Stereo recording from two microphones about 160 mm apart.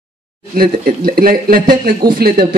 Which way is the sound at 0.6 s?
65° right (ahead or behind).